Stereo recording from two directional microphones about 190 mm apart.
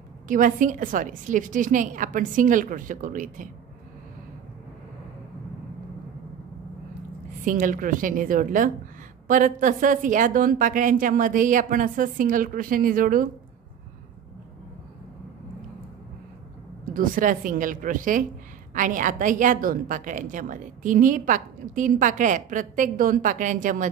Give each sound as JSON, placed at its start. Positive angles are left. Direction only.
{"t": 0.3, "sound": "a woman's voice", "side_deg": -45}
{"t": 7.4, "sound": "a woman's voice", "side_deg": -45}
{"t": 16.8, "sound": "a woman's voice", "side_deg": -45}